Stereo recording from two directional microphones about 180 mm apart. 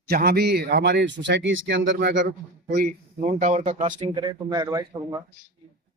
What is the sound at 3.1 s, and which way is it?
Speech, 40° right (ahead or behind).